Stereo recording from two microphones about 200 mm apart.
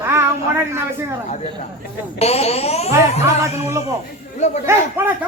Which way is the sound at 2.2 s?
30° left (ahead or behind).